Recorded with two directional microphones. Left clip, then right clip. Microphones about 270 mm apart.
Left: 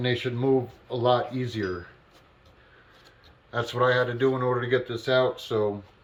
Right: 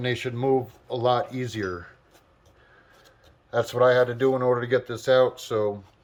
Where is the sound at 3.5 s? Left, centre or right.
Right.